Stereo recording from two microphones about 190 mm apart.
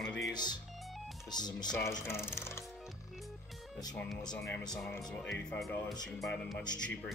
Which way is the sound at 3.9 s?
5° left (ahead or behind).